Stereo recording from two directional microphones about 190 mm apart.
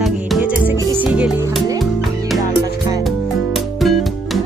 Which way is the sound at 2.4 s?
20° right (ahead or behind).